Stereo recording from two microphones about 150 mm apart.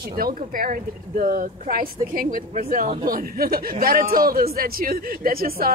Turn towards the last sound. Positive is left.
turn(degrees=-80)